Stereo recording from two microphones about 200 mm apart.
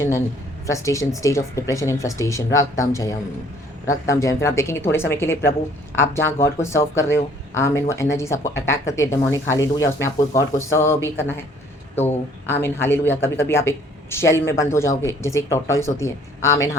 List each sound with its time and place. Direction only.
0.7 s speech: 15° left (ahead or behind)
12.5 s speech: 10° left (ahead or behind)